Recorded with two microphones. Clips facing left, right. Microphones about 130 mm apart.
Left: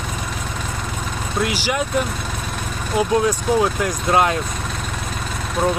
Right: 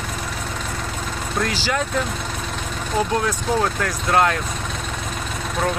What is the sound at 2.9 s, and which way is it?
Speech, 15° left (ahead or behind).